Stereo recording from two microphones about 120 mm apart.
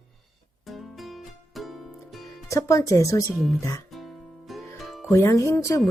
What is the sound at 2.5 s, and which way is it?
Speech, 25° left (ahead or behind).